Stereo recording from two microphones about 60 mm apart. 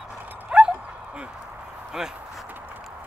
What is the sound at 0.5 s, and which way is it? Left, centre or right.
Dog, centre.